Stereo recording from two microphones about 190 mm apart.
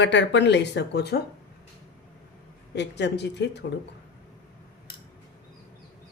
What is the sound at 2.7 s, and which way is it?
Speech, 65° left (ahead or behind).